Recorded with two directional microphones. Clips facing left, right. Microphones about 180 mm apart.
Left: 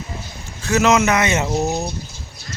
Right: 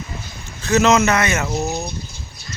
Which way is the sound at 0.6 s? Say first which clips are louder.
Right 1 dB; 10° left (ahead or behind).